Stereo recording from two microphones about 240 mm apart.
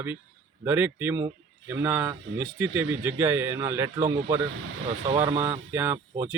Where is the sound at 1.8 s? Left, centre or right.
Centre.